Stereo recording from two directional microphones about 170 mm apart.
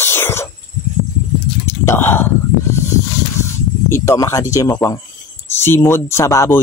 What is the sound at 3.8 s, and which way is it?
Speech, 15° left (ahead or behind).